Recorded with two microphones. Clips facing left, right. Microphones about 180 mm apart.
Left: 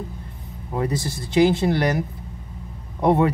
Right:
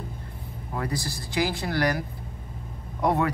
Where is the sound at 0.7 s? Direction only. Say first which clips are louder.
Left 6 dB; 25° left (ahead or behind).